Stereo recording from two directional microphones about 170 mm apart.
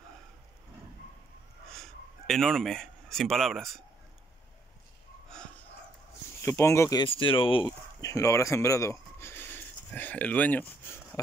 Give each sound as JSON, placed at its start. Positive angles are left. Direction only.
{"t": 1.7, "sound": "speech", "side_deg": 0}
{"t": 6.4, "sound": "speech", "side_deg": 15}
{"t": 7.1, "sound": "speech", "side_deg": 30}
{"t": 8.0, "sound": "speech", "side_deg": 20}